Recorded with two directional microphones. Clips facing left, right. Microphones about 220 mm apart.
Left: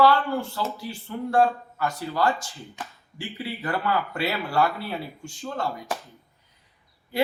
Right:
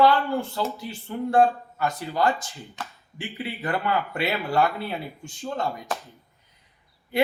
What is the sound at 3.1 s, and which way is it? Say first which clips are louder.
Speech: even; 20° right (ahead or behind).